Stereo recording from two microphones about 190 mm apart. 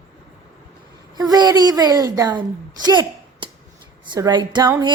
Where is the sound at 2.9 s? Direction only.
25° right (ahead or behind).